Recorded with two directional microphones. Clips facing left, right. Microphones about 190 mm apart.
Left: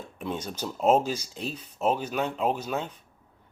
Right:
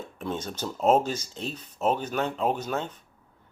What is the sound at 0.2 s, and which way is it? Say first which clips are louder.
Speech: even; 10° left (ahead or behind).